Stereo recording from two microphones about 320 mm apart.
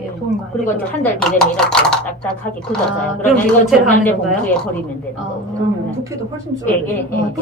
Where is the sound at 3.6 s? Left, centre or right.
Centre.